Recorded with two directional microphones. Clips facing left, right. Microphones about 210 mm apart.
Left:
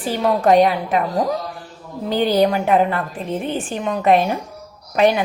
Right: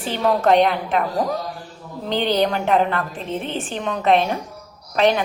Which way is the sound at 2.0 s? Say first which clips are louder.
Left 3 dB; 10° left (ahead or behind).